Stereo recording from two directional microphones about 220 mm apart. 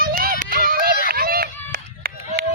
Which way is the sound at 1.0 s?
40° right (ahead or behind).